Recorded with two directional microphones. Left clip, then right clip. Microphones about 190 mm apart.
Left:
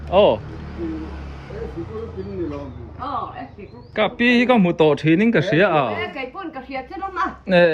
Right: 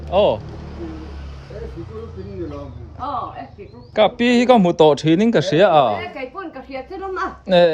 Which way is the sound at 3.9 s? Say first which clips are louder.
Right 2 dB; 15° right (ahead or behind).